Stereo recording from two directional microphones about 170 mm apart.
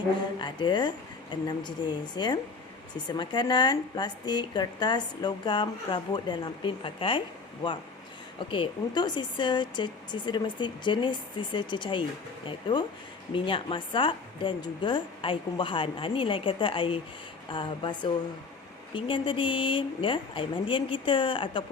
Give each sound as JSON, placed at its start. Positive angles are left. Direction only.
{"t": 0.3, "sound": "speech", "side_deg": 25}
{"t": 8.4, "sound": "speech", "side_deg": 30}